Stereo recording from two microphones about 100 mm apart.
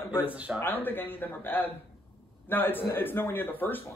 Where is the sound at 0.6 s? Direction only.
20° left (ahead or behind).